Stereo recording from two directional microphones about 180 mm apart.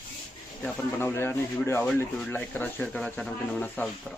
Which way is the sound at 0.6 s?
10° left (ahead or behind).